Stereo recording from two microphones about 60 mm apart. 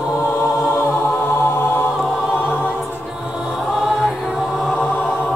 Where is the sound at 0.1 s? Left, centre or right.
Left.